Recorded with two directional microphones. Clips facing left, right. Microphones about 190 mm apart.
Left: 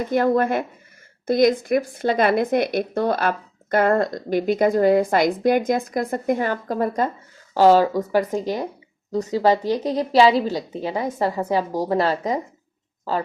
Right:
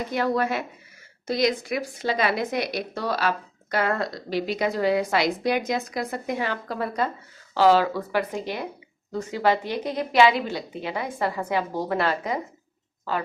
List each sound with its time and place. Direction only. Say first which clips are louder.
0.1 s a woman's voice: left 6 dB; 50° left (ahead or behind)